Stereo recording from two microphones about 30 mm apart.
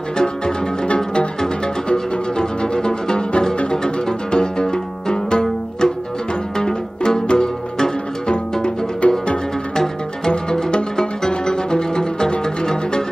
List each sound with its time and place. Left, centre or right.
0.9 s music: left
9.0 s music: left
9.8 s music: left